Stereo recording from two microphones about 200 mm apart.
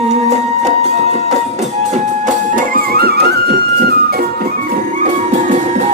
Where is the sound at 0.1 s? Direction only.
35° right (ahead or behind).